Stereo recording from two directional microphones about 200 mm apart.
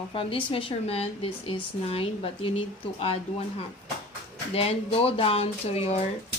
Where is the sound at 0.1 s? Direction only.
25° left (ahead or behind).